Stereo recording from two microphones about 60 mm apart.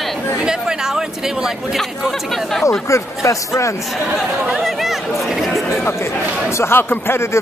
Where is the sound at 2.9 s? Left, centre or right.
Left.